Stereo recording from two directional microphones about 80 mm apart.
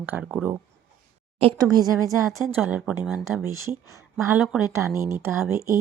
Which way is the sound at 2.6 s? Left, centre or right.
Centre.